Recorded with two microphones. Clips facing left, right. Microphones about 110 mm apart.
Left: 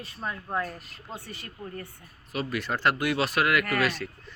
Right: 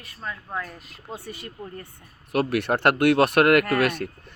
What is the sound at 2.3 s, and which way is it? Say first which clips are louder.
Speech: right 8 dB; 60° right (ahead or behind).